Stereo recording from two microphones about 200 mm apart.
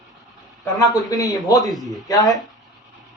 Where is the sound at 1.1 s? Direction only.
15° left (ahead or behind).